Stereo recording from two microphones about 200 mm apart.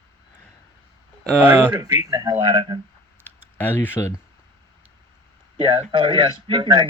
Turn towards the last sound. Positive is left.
turn(degrees=-20)  # may be behind; listen again after turning